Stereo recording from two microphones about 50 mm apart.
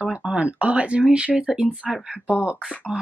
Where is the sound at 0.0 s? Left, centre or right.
Right.